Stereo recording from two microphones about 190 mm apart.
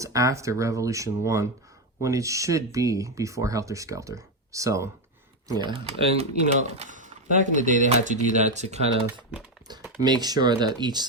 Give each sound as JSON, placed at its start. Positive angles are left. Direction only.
{"t": 0.0, "sound": "speech", "side_deg": -15}
{"t": 10.0, "sound": "speech", "side_deg": -20}